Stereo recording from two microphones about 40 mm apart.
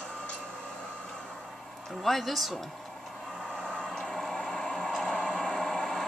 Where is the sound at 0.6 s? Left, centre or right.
Centre.